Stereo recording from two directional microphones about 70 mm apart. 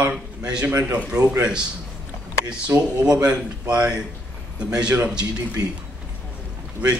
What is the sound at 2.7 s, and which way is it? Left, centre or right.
Speech, right.